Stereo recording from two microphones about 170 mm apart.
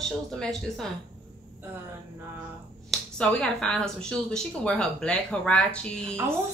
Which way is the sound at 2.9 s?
5° left (ahead or behind).